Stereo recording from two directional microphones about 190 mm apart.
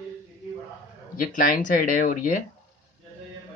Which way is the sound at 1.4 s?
45° left (ahead or behind).